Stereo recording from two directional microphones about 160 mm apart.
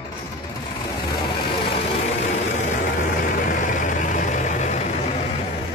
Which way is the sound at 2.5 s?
50° left (ahead or behind).